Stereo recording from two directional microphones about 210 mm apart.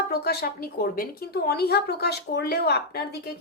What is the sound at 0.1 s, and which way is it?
A woman's voice, 45° left (ahead or behind).